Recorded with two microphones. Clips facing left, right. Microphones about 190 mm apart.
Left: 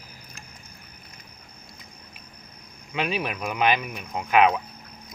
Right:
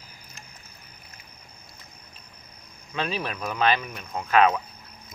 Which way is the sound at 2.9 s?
15° left (ahead or behind).